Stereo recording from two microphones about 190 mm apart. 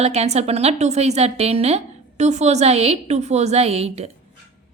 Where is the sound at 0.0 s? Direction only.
35° right (ahead or behind).